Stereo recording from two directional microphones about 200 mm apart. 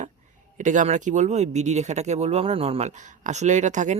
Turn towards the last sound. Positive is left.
turn(degrees=-35)  # may be behind; listen again after turning